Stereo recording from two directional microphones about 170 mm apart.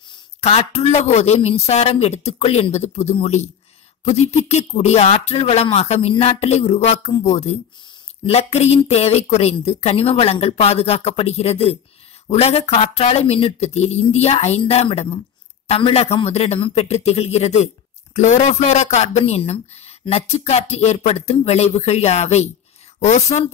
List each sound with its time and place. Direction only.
0.1 s a woman's voice: 40° left (ahead or behind)